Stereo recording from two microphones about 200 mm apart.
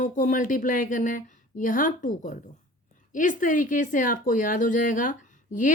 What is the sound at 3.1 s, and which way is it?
A woman's voice, 40° left (ahead or behind).